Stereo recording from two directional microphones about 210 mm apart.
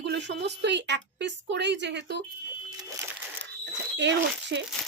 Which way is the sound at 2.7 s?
20° right (ahead or behind).